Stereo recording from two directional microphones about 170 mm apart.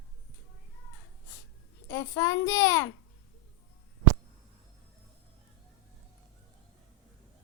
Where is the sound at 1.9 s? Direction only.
15° left (ahead or behind).